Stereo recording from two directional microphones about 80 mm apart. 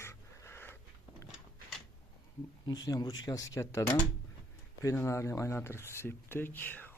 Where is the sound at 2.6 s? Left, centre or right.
Left.